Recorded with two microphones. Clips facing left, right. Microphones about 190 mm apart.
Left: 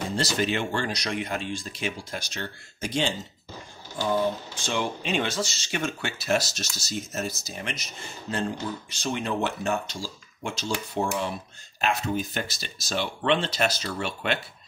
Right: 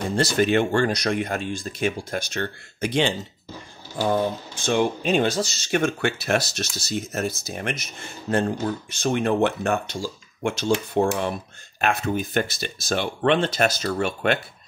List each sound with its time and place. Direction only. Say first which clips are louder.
0.1 s speech: right 8 dB; 55° right (ahead or behind)
4.6 s speech: right 7 dB; 45° right (ahead or behind)
5.7 s speech: right 8 dB; 55° right (ahead or behind)